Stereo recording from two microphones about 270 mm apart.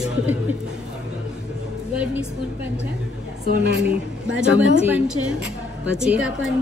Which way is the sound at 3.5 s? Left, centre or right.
Right.